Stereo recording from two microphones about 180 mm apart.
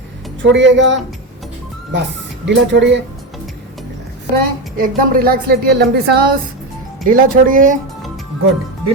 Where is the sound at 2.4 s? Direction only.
80° right.